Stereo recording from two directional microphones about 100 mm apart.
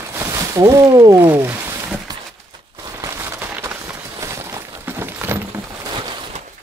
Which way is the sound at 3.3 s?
15° right (ahead or behind).